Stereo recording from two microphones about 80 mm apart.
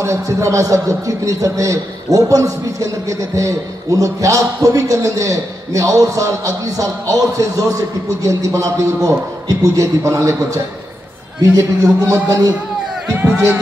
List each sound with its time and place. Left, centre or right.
0.0 s a man's voice: right